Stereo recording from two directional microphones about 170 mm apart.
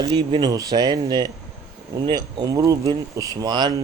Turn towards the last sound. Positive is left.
turn(degrees=-25)  # may be behind; listen again after turning